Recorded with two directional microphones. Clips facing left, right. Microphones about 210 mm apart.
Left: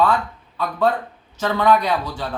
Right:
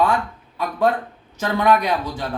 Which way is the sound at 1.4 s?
15° right (ahead or behind).